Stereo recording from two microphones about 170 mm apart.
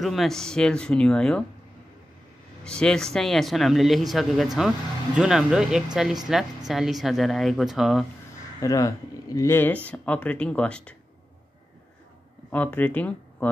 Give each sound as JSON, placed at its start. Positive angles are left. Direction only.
{"t": 0.0, "sound": "a man's voice", "side_deg": 0}
{"t": 2.6, "sound": "a man's voice", "side_deg": 5}
{"t": 8.5, "sound": "speech", "side_deg": 20}
{"t": 12.4, "sound": "speech", "side_deg": 10}